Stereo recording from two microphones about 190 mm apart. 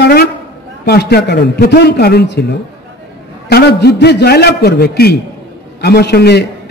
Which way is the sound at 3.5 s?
60° left (ahead or behind).